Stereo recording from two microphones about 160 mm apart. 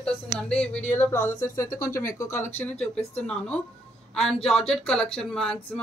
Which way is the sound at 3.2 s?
5° left (ahead or behind).